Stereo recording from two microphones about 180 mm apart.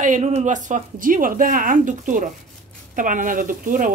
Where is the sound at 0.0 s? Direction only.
45° right (ahead or behind).